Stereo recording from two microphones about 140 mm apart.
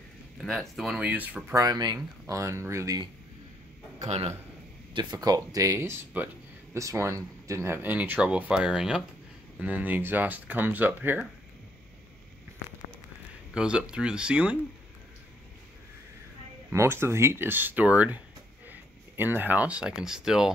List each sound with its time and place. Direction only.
0.4 s speech: centre (ahead or behind)
1.5 s speech: 25° right (ahead or behind)
4.9 s speech: 30° right (ahead or behind); by 11.2 s 10° right (ahead or behind)
12.5 s a sound: 20° right (ahead or behind)
13.6 s speech: 5° right (ahead or behind)
16.7 s speech: 15° right (ahead or behind)
18.7 s a sound: 15° right (ahead or behind)
20.0 s speech: 5° right (ahead or behind)